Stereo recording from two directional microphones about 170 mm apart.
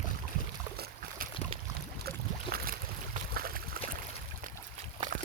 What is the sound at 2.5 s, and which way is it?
Boat, 60° right (ahead or behind).